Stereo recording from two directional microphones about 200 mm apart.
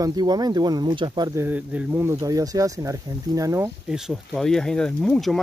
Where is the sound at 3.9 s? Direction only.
Centre (ahead or behind).